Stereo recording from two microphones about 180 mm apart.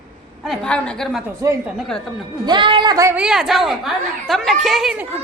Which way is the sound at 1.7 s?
Centre (ahead or behind).